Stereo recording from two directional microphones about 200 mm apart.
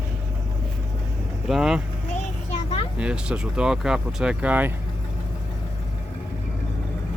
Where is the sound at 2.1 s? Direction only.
30° left (ahead or behind).